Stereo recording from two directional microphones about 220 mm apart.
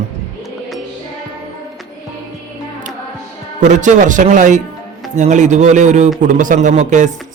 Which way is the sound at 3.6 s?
35° right (ahead or behind).